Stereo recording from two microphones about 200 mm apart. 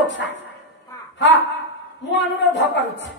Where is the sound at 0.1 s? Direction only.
65° left (ahead or behind).